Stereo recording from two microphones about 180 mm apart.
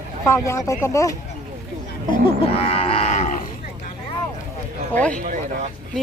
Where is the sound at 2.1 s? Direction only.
30° left (ahead or behind).